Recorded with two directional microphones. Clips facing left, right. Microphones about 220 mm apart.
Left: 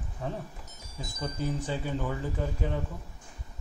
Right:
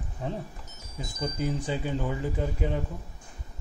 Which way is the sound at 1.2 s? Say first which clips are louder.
Right 2 dB; 15° right (ahead or behind).